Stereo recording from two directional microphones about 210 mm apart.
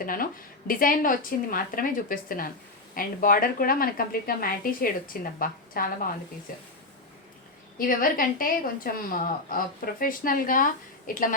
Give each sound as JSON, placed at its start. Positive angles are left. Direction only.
{"t": 0.0, "sound": "a woman's voice", "side_deg": 40}
{"t": 7.8, "sound": "a woman's voice", "side_deg": 40}